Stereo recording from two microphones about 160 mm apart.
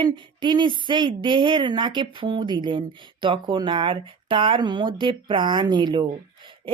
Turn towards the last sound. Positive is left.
turn(degrees=-30)  # may be behind; listen again after turning